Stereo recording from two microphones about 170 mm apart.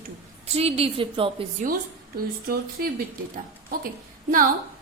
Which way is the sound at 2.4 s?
65° right (ahead or behind).